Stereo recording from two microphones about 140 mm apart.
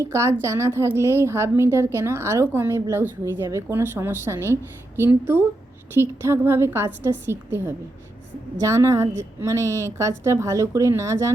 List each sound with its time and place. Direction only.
0.0 s a woman's voice: 20° right (ahead or behind)